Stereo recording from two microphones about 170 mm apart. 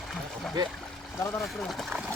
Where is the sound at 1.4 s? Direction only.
Centre (ahead or behind).